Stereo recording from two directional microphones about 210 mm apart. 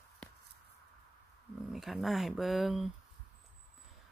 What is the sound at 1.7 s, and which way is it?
Speech, centre (ahead or behind).